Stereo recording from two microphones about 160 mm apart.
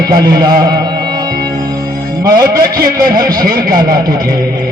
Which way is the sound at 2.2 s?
25° right (ahead or behind).